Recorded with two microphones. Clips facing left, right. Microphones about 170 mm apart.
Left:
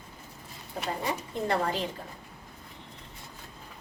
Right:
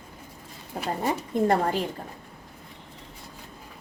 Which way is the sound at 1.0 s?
45° right (ahead or behind).